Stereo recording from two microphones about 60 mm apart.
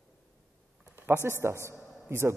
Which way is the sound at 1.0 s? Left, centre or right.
Right.